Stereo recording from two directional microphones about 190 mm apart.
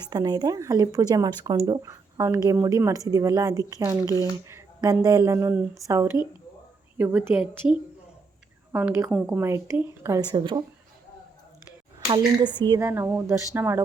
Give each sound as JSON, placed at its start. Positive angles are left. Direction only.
{"t": 0.1, "sound": "speech", "side_deg": -20}
{"t": 11.9, "sound": "speech", "side_deg": -20}